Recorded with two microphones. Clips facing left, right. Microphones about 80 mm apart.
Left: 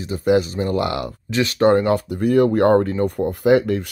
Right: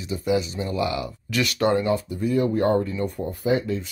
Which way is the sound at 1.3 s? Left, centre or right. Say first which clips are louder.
Left 6 dB; left.